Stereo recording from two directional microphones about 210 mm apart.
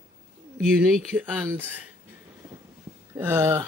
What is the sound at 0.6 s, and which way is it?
Speech, centre (ahead or behind).